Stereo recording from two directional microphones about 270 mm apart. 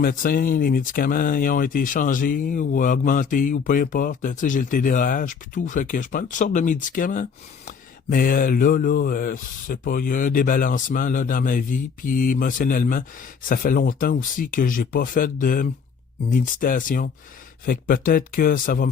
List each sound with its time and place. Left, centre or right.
0.0 s speech: left